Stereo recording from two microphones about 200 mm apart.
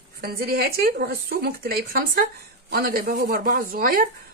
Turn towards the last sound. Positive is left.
turn(degrees=-45)  # may be behind; listen again after turning